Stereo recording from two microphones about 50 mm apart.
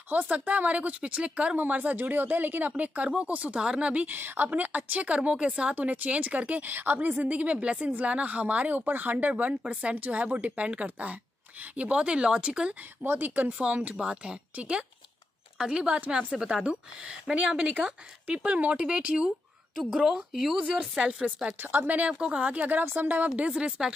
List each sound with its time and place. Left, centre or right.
0.1 s a woman's voice: right
1.6 s a woman's voice: right
2.8 s a woman's voice: right
4.1 s a woman's voice: right
9.3 s a woman's voice: right
9.9 s a woman's voice: right
13.0 s a woman's voice: right
13.5 s a woman's voice: right
17.3 s a woman's voice: right
20.1 s speech: centre
21.5 s a woman's voice: right